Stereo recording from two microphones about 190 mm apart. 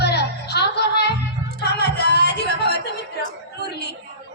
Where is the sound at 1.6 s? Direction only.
60° left (ahead or behind).